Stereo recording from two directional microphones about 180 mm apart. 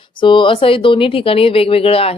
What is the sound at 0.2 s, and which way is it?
Speech, 25° left (ahead or behind).